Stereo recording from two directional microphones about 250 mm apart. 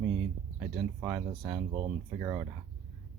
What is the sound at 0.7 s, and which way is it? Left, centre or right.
Speech, centre.